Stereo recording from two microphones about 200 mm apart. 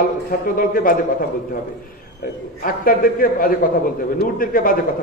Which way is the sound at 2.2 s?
45° left (ahead or behind).